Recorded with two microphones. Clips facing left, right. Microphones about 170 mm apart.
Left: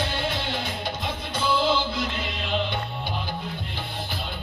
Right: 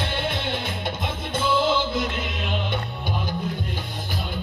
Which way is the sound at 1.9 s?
50° right (ahead or behind).